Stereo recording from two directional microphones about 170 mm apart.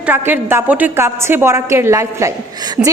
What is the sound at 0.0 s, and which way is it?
A woman's voice, 10° right (ahead or behind).